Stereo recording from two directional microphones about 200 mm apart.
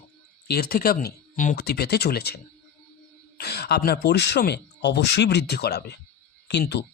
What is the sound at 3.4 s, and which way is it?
Speech, 55° left (ahead or behind).